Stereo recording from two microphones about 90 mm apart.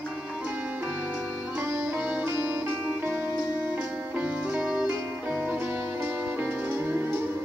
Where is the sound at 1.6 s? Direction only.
25° right (ahead or behind).